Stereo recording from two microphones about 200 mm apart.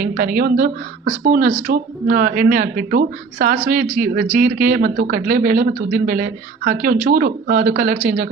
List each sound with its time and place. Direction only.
0.0 s speech: 45° right (ahead or behind)